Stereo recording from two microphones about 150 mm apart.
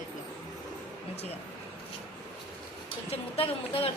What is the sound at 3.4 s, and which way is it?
Speech, 40° left (ahead or behind).